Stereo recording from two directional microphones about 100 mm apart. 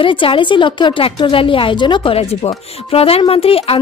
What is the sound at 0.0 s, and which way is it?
Speech, 60° left (ahead or behind).